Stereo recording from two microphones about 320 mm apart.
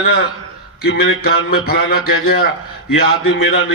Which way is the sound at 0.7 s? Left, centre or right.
Left.